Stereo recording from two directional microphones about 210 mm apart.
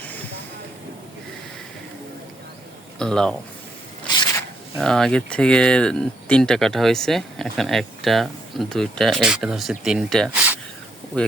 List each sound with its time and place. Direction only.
0.0 s train: 10° left (ahead or behind)
3.0 s speech: 5° left (ahead or behind)
4.0 s a sound: 20° left (ahead or behind)
4.8 s speech: centre (ahead or behind)